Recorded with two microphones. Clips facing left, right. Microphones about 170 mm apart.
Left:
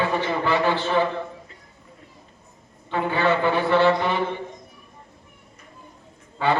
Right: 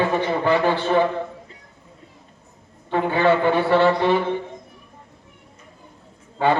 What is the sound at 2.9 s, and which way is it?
A man's voice, 50° right (ahead or behind).